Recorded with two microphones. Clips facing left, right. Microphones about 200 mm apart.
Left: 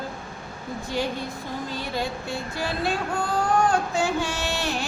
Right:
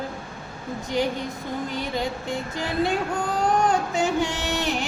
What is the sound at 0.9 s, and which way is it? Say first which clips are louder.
A woman's voice: right 3 dB; 20° right (ahead or behind).